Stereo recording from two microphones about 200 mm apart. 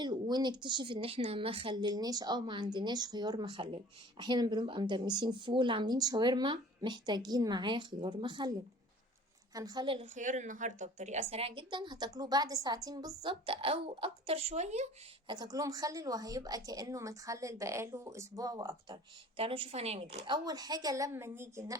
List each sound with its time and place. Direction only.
0.0 s a woman's voice: 20° right (ahead or behind)
9.6 s a woman's voice: 20° right (ahead or behind)
15.3 s a woman's voice: 20° right (ahead or behind)
19.4 s a woman's voice: 30° right (ahead or behind); by 21.8 s 15° right (ahead or behind)